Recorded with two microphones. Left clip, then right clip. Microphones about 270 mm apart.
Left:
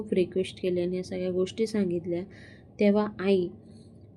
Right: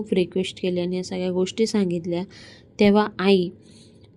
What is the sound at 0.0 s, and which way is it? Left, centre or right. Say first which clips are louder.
A woman's voice: right 4 dB; right.